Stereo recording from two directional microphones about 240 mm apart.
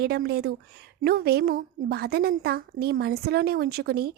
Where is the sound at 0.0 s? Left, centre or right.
Right.